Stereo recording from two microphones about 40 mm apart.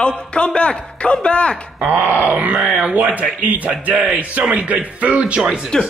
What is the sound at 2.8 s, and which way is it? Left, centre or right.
Music, right.